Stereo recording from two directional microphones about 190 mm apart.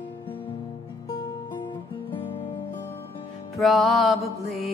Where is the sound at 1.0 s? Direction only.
25° left (ahead or behind).